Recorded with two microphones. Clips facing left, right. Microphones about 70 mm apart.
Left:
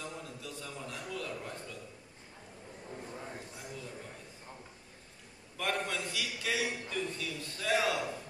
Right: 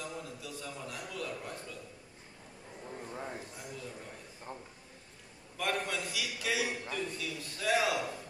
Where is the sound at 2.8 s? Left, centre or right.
Centre.